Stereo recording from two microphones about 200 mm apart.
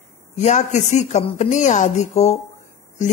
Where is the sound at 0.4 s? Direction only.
35° left (ahead or behind).